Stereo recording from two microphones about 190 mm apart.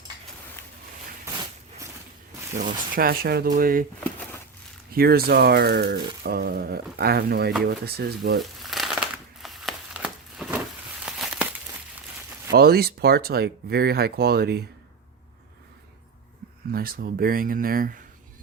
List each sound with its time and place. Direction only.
2.6 s speech: 45° right (ahead or behind)
4.9 s speech: 55° right (ahead or behind)
8.7 s crushing: centre (ahead or behind)
11.0 s a sound: 5° right (ahead or behind)
12.5 s speech: 55° right (ahead or behind)
16.7 s speech: 50° right (ahead or behind)